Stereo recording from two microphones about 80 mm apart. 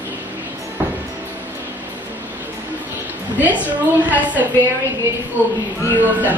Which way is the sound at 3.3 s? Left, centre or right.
Right.